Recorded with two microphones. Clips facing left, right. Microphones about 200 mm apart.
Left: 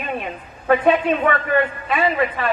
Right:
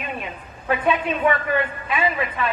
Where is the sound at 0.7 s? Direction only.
55° left (ahead or behind).